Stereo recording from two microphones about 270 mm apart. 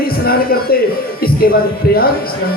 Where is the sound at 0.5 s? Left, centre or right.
Left.